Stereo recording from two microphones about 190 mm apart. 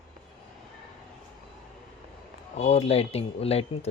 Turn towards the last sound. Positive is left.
turn(degrees=30)  # may be behind; listen again after turning